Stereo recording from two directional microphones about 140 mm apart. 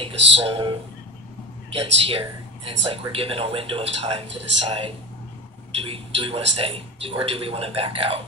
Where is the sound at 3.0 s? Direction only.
40° right (ahead or behind).